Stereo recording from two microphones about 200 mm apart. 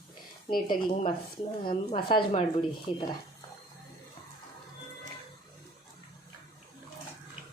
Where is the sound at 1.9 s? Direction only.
25° left (ahead or behind).